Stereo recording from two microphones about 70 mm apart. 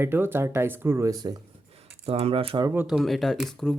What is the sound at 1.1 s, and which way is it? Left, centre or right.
Speech, right.